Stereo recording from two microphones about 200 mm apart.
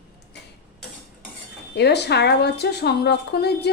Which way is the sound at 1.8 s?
55° left (ahead or behind).